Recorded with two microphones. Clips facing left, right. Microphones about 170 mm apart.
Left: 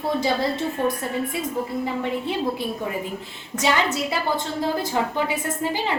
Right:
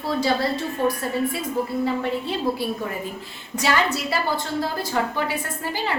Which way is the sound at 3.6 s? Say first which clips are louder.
Even; 20° left (ahead or behind).